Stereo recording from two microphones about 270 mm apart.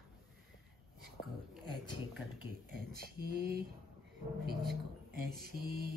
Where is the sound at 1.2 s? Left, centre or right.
Left.